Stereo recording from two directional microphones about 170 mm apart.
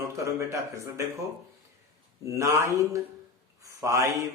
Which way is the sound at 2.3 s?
15° right (ahead or behind).